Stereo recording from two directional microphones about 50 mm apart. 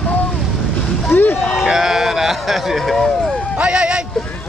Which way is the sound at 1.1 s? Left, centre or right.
Left.